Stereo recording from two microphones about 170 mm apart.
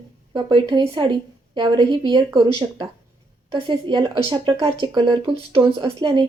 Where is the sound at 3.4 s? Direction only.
30° right (ahead or behind).